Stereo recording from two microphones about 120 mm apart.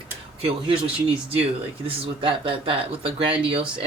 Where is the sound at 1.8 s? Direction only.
45° right (ahead or behind).